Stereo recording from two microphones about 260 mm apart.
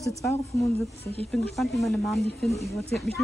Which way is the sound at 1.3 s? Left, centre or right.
Centre.